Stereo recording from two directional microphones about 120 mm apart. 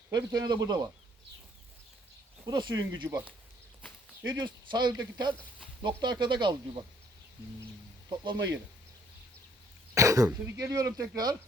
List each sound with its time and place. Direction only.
0.1 s speech: 35° right (ahead or behind)
2.5 s speech: 35° right (ahead or behind)
3.1 s speech: 20° right (ahead or behind)
4.3 s speech: 40° right (ahead or behind)
8.2 s speech: 40° right (ahead or behind)
9.9 s speech: 25° right (ahead or behind)